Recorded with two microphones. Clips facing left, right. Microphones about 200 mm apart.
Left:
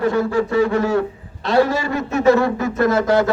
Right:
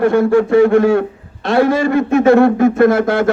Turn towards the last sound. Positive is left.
turn(degrees=-55)  # may be behind; listen again after turning